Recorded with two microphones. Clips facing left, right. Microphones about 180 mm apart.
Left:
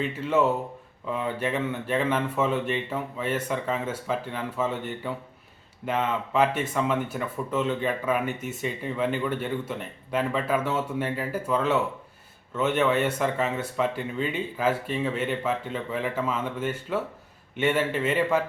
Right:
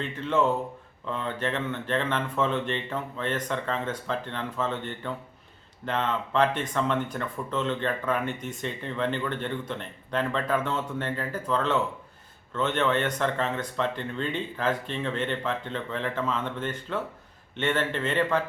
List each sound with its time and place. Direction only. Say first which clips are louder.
0.0 s speech: left 2 dB; 10° left (ahead or behind)